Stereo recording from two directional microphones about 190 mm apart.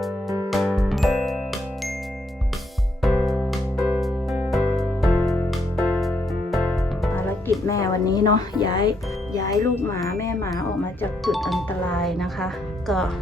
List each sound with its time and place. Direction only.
0.0 s music: centre (ahead or behind)
3.0 s music: centre (ahead or behind)
7.2 s speech: 10° left (ahead or behind)
9.9 s chime: 15° left (ahead or behind)
11.2 s speech: centre (ahead or behind)